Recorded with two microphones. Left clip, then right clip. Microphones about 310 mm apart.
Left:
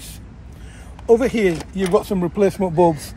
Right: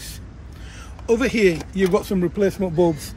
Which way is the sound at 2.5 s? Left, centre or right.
Left.